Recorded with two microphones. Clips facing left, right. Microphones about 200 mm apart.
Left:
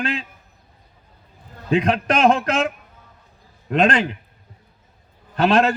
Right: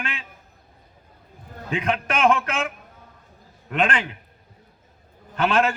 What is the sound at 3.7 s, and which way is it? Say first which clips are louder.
Speech: left 6 dB; 35° left (ahead or behind).